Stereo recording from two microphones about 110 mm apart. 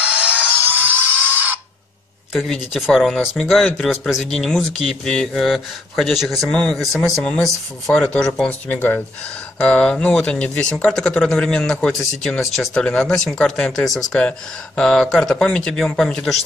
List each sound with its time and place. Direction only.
0.0 s tools: 10° right (ahead or behind)
2.3 s speech: centre (ahead or behind)